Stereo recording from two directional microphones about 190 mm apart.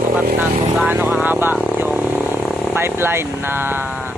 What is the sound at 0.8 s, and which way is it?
Vehicle, 10° right (ahead or behind).